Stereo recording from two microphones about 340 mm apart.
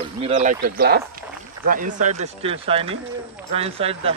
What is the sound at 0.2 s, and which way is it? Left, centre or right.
Speech, centre.